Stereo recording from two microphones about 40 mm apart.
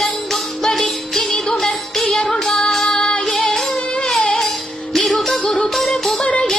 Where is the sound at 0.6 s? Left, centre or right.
Centre.